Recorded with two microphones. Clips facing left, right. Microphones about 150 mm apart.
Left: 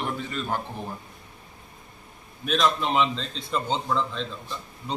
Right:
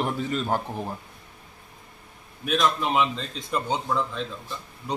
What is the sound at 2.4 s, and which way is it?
A man's voice, 5° right (ahead or behind).